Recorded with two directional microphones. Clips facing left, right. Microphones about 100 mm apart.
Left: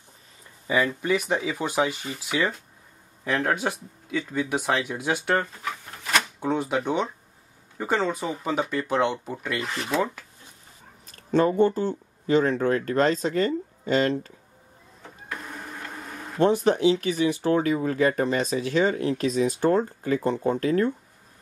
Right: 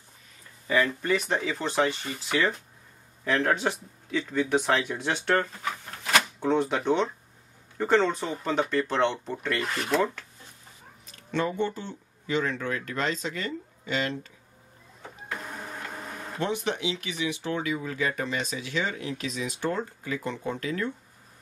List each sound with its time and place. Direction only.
0.7 s speech: 10° left (ahead or behind)
11.1 s speech: 40° left (ahead or behind)
16.3 s speech: 40° left (ahead or behind)